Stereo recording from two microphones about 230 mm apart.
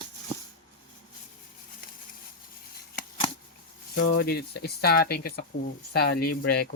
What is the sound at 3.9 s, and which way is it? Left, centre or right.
Speech, left.